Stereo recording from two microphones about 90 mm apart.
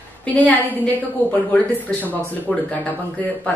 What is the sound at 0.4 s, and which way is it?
Speech, 20° left (ahead or behind).